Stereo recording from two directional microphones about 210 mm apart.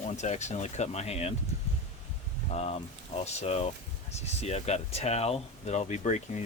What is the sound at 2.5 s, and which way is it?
Speech, 30° left (ahead or behind).